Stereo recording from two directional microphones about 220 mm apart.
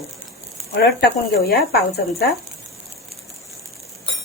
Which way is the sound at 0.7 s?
45° left (ahead or behind).